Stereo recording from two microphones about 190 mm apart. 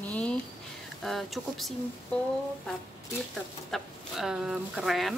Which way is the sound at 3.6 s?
Centre (ahead or behind).